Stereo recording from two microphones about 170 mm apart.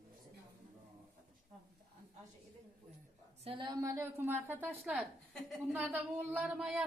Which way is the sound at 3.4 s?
30° right (ahead or behind).